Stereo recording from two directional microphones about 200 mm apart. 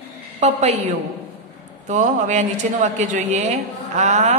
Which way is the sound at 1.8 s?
35° right (ahead or behind).